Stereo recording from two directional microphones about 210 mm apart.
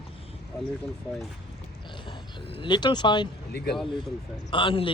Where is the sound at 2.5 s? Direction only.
20° left (ahead or behind).